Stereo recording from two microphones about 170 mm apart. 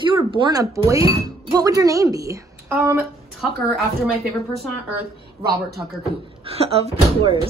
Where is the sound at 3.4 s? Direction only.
Centre (ahead or behind).